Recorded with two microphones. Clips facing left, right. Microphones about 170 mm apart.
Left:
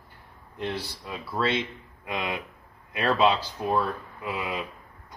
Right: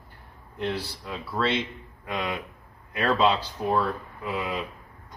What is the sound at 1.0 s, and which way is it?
Speech, 10° left (ahead or behind).